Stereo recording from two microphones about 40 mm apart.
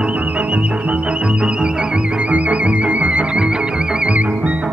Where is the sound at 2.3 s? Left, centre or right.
Right.